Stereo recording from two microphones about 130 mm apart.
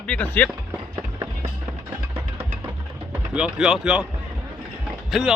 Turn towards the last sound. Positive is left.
turn(degrees=0)  # may be behind; listen again after turning